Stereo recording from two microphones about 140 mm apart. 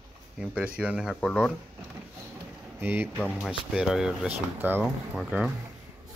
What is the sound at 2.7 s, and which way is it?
Speech, 15° right (ahead or behind).